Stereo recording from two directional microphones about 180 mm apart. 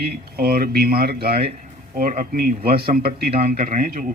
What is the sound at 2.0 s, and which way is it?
Speech, 50° right (ahead or behind).